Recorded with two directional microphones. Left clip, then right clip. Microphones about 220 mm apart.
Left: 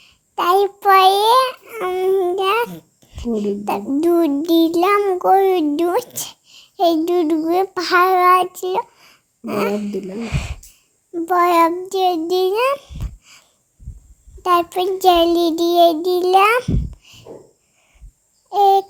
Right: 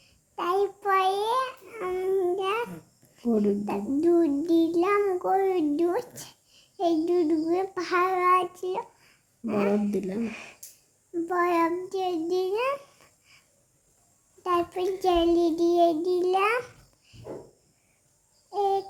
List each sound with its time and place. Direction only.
0.0 s child singing: 40° left (ahead or behind)
3.7 s child singing: 40° left (ahead or behind)
9.9 s speech: 5° left (ahead or behind)
10.2 s a child's voice: 40° left (ahead or behind)
14.4 s child singing: 40° left (ahead or behind)
18.5 s child singing: 40° left (ahead or behind)